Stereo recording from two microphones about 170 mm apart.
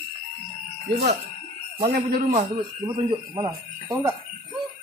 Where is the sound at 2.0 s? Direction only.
50° right (ahead or behind).